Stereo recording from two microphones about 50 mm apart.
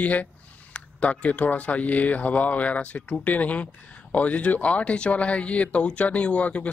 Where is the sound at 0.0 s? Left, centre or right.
Left.